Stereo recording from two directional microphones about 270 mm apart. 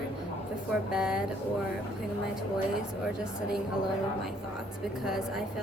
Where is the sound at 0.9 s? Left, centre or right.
Centre.